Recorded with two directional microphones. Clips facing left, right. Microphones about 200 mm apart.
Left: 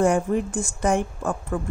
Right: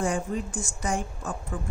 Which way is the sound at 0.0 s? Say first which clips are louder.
Left 8 dB; 60° left (ahead or behind).